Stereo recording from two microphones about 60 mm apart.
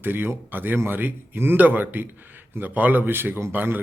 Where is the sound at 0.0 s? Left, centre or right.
Right.